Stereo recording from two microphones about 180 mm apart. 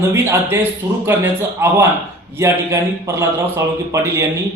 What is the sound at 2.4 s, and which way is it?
A man's voice, 15° right (ahead or behind).